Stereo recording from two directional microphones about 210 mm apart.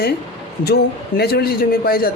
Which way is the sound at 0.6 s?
50° left (ahead or behind).